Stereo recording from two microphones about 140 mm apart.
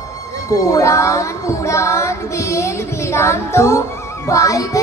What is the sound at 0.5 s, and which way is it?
Child singing, 20° left (ahead or behind).